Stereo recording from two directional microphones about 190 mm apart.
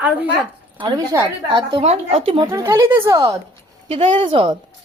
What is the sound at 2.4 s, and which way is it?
Speech, 15° right (ahead or behind).